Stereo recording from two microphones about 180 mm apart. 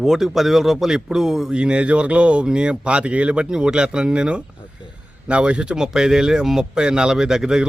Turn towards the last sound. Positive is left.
turn(degrees=-5)  # may be behind; listen again after turning